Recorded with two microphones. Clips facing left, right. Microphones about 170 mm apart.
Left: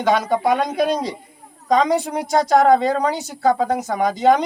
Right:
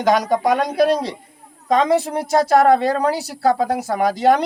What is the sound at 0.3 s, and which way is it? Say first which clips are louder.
Speech: right 1 dB; 35° right (ahead or behind).